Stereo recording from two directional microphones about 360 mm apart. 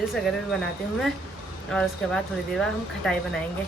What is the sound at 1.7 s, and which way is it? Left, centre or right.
Speech, centre.